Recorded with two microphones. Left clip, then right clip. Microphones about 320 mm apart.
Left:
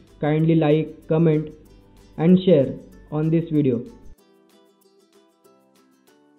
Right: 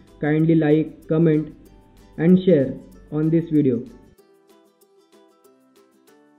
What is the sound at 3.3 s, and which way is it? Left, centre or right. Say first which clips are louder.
Speech: right 2 dB; left.